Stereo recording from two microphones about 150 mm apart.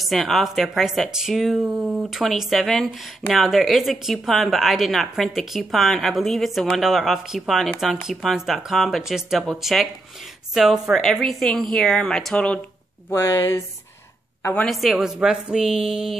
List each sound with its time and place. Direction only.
0.0 s speech: centre (ahead or behind)
13.1 s speech: 20° left (ahead or behind)
14.5 s speech: 5° left (ahead or behind)